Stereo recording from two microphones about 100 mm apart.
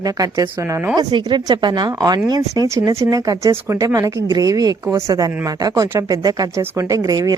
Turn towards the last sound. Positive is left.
turn(degrees=-35)  # may be behind; listen again after turning